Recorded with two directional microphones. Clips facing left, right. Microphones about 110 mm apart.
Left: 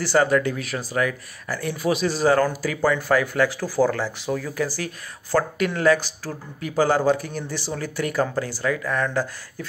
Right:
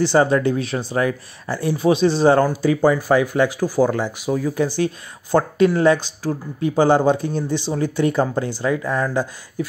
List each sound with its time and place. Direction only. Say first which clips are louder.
0.0 s speech: right 3 dB; 25° right (ahead or behind)